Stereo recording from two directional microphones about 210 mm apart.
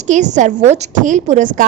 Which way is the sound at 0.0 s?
35° right (ahead or behind).